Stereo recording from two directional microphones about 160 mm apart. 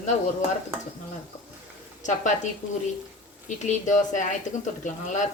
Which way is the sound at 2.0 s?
50° left (ahead or behind).